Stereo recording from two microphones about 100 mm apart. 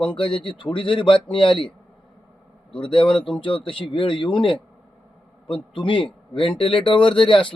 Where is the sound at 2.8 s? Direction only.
60° left (ahead or behind).